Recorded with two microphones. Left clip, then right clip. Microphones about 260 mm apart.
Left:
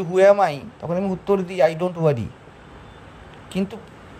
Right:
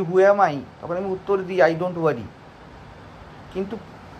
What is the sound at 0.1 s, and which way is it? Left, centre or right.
Speech, left.